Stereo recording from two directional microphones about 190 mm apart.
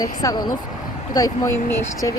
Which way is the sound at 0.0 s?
20° left (ahead or behind).